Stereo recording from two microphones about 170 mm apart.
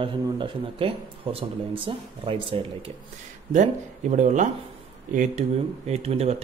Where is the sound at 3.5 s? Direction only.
45° right (ahead or behind).